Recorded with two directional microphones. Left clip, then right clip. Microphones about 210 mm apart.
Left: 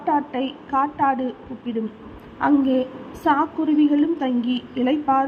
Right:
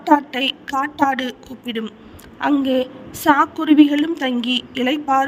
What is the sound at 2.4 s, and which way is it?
Speech, 50° right (ahead or behind).